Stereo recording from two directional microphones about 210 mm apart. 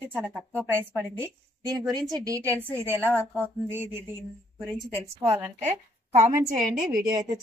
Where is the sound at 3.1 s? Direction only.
5° left (ahead or behind).